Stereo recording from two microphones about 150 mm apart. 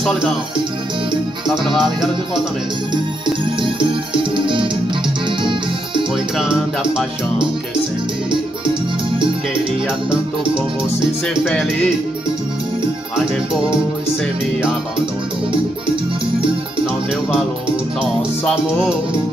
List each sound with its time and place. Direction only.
0.0 s speech: centre (ahead or behind)
1.5 s music: centre (ahead or behind)
3.6 s music: 35° right (ahead or behind)
6.3 s music: 5° right (ahead or behind)
11.4 s speech: 10° left (ahead or behind)
18.4 s music: 5° right (ahead or behind)